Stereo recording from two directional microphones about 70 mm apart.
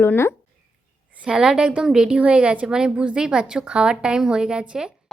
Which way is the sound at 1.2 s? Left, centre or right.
Centre.